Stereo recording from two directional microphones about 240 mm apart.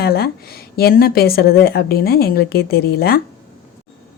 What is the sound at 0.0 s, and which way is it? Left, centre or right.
Speech, left.